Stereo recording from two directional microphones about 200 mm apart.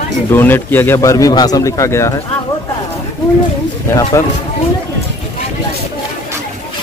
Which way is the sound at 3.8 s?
15° left (ahead or behind).